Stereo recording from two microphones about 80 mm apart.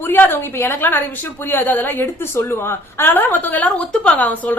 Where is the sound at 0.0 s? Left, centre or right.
Left.